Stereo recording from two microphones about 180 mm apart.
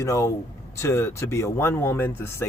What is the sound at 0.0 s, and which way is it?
Speech, 15° left (ahead or behind).